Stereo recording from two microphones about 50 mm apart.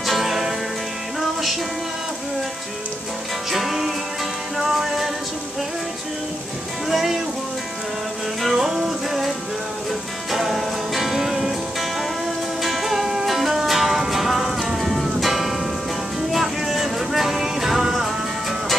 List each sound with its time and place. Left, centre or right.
0.0 s music: centre
3.5 s music: centre
6.9 s music: centre
8.4 s music: centre
10.3 s music: centre
12.6 s music: centre